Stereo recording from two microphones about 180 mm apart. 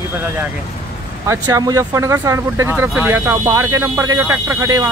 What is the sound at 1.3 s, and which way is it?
Speech, 20° right (ahead or behind).